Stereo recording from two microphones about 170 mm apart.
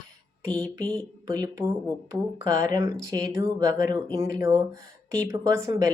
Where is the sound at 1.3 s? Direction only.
20° right (ahead or behind).